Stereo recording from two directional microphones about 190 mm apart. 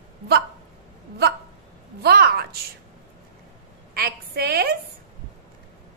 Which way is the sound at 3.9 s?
55° right (ahead or behind).